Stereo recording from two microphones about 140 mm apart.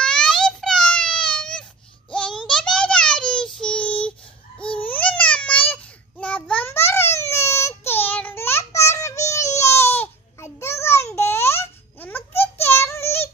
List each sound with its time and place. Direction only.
0.0 s a sound: 5° left (ahead or behind)
4.8 s babbling: 10° left (ahead or behind)
7.2 s child singing: 20° left (ahead or behind)